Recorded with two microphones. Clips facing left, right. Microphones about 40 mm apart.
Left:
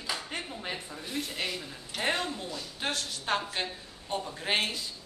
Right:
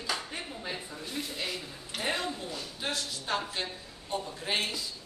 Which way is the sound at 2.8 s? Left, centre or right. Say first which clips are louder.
Left 2 dB; left.